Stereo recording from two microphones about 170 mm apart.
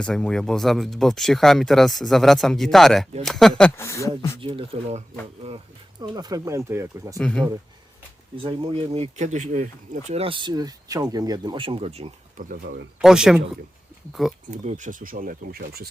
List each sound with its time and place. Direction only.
0.0 s speech: 5° left (ahead or behind)
3.8 s speech: 15° left (ahead or behind)
4.4 s speech: 30° right (ahead or behind)
6.0 s speech: 25° right (ahead or behind)
7.2 s speech: 5° left (ahead or behind)
8.4 s speech: 35° right (ahead or behind)
12.4 s speech: 50° right (ahead or behind)
13.0 s speech: 5° right (ahead or behind)
14.6 s speech: 45° right (ahead or behind); by 15.9 s 65° right (ahead or behind)